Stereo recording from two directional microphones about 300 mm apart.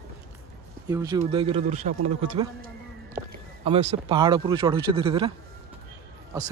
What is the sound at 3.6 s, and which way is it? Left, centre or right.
Speech, centre.